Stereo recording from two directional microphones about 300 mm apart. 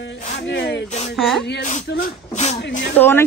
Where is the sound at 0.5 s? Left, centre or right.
Left.